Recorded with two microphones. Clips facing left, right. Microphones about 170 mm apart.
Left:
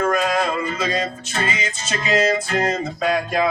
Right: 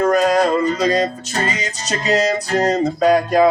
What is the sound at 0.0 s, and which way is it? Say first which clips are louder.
Music: right 5 dB; 40° right (ahead or behind).